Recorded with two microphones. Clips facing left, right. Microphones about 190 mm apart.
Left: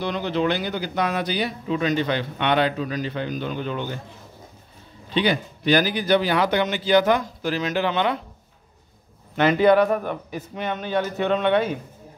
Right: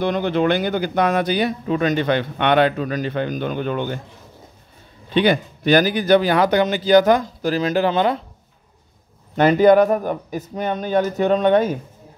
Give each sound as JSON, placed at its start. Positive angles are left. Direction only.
{"t": 0.0, "sound": "speech", "side_deg": -55}
{"t": 5.1, "sound": "speech", "side_deg": -50}
{"t": 9.4, "sound": "speech", "side_deg": -40}